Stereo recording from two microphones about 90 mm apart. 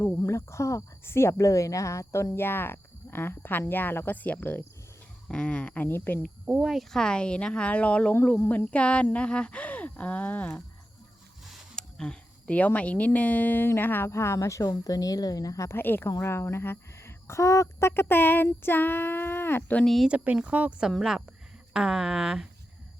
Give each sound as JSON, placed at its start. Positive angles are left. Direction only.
{"t": 0.3, "sound": "speech", "side_deg": 35}
{"t": 6.4, "sound": "speech", "side_deg": -10}
{"t": 11.4, "sound": "a woman's voice", "side_deg": 5}
{"t": 15.8, "sound": "speech", "side_deg": 25}
{"t": 19.8, "sound": "speech", "side_deg": 0}
{"t": 20.1, "sound": "speech", "side_deg": -15}